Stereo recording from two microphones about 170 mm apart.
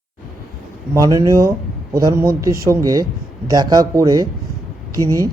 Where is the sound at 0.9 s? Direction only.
20° right (ahead or behind).